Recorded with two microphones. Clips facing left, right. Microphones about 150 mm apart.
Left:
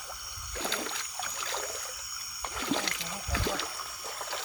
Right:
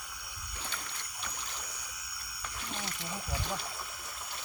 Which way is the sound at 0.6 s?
90° left.